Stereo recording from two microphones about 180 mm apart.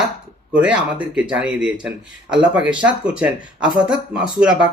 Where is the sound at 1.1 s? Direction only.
5° right (ahead or behind).